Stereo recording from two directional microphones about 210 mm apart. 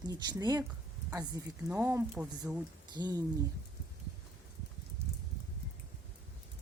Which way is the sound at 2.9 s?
20° right (ahead or behind).